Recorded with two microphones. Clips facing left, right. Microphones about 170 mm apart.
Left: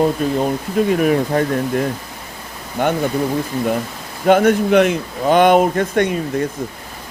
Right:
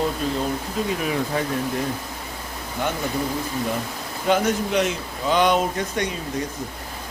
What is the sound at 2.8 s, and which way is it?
Speech, 60° left (ahead or behind).